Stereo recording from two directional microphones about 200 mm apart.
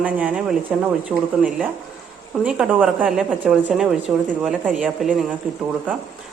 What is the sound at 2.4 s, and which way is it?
A woman's voice, 5° right (ahead or behind).